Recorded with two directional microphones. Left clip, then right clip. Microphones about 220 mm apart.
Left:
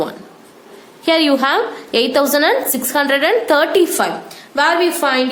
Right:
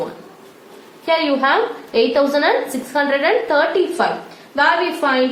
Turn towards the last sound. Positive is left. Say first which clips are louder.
# left 2 dB
turn(degrees=55)  # may be behind; listen again after turning